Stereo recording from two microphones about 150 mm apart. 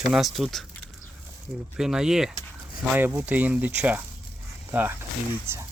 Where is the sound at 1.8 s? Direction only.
5° right (ahead or behind).